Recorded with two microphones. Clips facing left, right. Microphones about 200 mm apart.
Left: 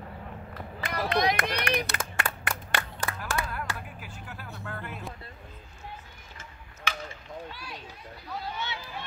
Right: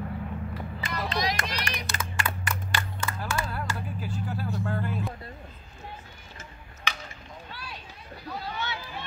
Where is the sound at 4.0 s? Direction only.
35° right (ahead or behind).